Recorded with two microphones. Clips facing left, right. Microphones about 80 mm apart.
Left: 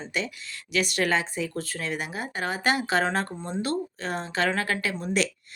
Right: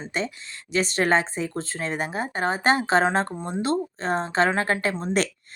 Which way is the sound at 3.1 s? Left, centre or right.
Right.